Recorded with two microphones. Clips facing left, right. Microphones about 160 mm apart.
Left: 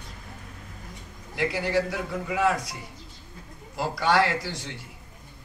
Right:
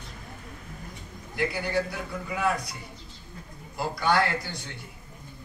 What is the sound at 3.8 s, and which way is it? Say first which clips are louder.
Speech: left 2 dB; 90° left.